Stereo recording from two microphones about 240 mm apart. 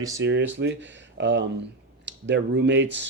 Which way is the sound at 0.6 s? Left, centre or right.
Right.